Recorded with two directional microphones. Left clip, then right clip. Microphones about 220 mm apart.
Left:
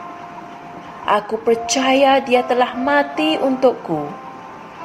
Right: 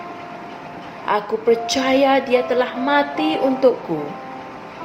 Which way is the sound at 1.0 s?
35° left (ahead or behind).